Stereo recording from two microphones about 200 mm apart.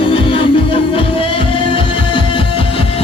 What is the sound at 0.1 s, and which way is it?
Music, 25° left (ahead or behind).